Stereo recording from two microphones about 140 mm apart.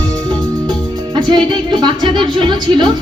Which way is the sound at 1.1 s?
30° right (ahead or behind).